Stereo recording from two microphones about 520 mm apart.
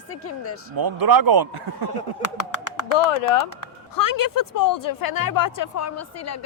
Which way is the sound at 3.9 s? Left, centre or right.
Left.